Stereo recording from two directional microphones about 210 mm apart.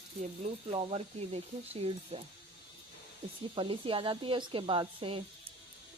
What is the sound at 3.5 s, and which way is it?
Speech, 25° right (ahead or behind).